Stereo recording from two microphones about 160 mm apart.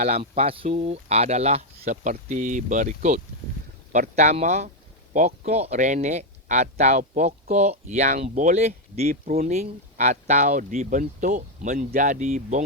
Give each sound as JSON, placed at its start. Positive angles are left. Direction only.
{"t": 0.0, "sound": "speech", "side_deg": -40}